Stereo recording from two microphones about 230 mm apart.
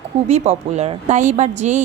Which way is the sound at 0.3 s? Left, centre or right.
Right.